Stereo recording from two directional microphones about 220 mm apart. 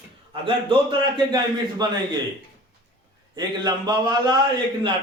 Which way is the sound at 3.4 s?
20° right (ahead or behind).